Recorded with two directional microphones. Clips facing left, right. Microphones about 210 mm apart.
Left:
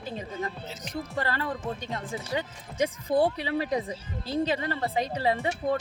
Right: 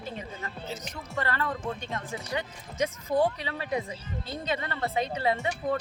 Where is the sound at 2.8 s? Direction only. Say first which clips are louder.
Left 2 dB; 35° left (ahead or behind).